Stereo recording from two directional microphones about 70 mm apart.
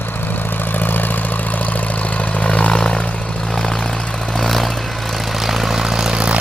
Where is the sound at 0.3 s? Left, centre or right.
Left.